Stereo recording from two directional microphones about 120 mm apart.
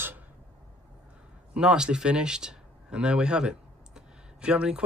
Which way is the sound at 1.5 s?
5° right (ahead or behind).